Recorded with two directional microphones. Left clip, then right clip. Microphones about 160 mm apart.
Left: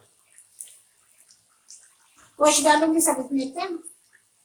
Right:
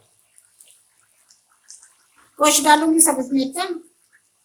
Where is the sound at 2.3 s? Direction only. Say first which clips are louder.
Right 3 dB; 65° right (ahead or behind).